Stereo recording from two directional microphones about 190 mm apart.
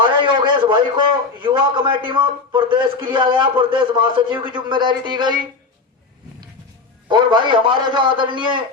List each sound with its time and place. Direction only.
0.2 s a man's voice: 25° right (ahead or behind)
7.1 s a man's voice: 25° right (ahead or behind)